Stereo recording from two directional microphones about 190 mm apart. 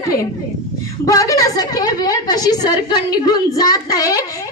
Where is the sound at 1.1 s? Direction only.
15° left (ahead or behind).